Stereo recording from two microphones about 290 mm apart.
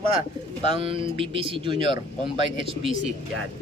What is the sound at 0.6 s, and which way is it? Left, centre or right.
Speech, centre.